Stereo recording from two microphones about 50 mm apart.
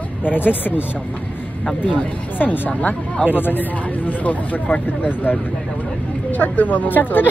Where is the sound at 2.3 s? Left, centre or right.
Left.